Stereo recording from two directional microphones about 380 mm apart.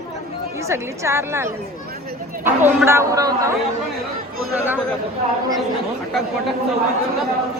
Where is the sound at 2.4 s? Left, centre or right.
Centre.